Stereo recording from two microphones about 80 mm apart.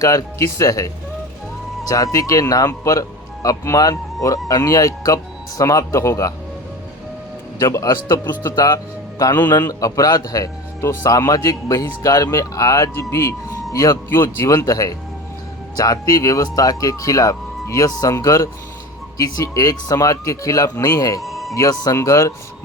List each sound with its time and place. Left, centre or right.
0.0 s speech: left
2.1 s speech: left
7.6 s speech: left
8.2 s speech: left
8.5 s a man's voice: left
14.1 s speech: left
14.5 s speech: left
21.2 s music: centre
21.5 s speech: left